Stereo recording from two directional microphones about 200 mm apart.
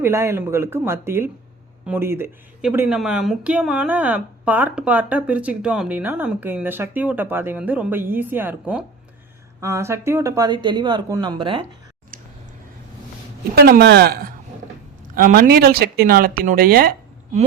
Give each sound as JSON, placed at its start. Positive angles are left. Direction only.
{"t": 0.0, "sound": "speech", "side_deg": -10}
{"t": 13.6, "sound": "speech", "side_deg": -50}